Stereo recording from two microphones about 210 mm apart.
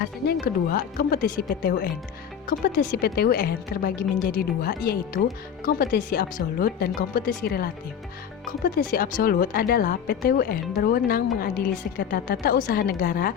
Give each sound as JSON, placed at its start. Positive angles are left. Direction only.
{"t": 0.4, "sound": "speech", "side_deg": 45}
{"t": 8.9, "sound": "speech", "side_deg": 40}